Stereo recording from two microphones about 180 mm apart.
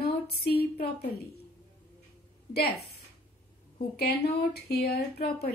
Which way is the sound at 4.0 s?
60° left (ahead or behind).